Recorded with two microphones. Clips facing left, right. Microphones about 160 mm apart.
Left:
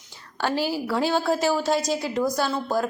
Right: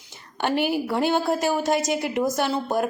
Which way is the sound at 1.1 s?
20° right (ahead or behind).